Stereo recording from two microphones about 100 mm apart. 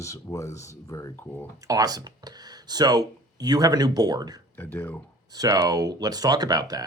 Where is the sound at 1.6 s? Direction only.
40° right (ahead or behind).